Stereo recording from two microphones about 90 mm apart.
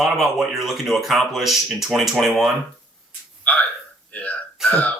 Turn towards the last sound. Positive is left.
turn(degrees=15)  # may be behind; listen again after turning